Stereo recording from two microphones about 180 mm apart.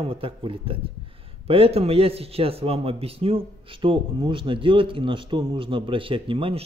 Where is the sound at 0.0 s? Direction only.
30° right (ahead or behind).